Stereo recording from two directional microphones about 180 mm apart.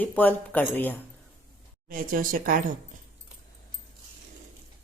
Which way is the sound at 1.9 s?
50° right (ahead or behind).